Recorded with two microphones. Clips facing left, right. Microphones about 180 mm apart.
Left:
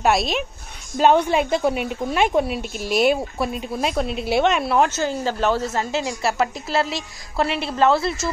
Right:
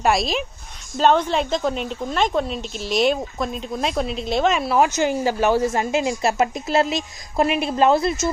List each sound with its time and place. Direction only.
0.0 s speech: centre (ahead or behind)
4.8 s a woman's voice: 15° right (ahead or behind)